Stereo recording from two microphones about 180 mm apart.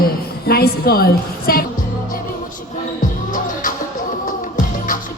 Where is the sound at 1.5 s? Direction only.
55° left (ahead or behind).